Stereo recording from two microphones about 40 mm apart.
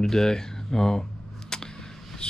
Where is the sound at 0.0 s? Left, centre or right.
Centre.